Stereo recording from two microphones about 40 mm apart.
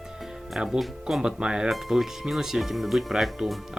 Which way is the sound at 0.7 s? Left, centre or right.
Centre.